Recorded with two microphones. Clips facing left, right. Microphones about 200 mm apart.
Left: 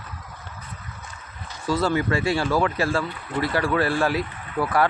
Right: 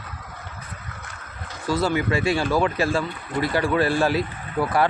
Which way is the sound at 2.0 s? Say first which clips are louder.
Right 1 dB; 20° right (ahead or behind).